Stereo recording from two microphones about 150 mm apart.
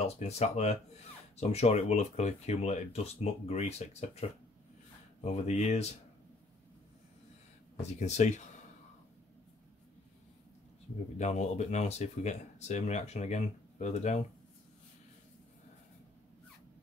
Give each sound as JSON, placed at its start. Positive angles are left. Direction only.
{"t": 0.0, "sound": "speech", "side_deg": 45}
{"t": 7.7, "sound": "speech", "side_deg": 50}
{"t": 11.1, "sound": "speech", "side_deg": 50}